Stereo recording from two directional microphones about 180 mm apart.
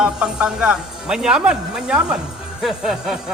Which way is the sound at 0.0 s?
5° right (ahead or behind).